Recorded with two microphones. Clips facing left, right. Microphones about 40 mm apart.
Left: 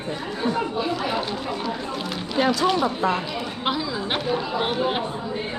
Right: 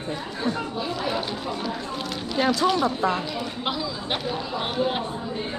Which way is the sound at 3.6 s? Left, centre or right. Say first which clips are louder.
Left 5 dB; centre.